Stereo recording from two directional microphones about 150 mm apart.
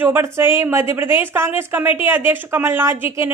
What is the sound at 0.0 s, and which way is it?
Speech, 15° right (ahead or behind).